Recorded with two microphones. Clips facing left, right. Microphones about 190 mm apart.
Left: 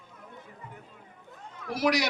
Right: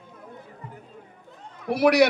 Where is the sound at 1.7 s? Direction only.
60° right (ahead or behind).